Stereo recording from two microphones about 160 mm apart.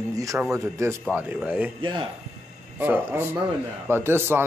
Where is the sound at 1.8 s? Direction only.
30° right (ahead or behind).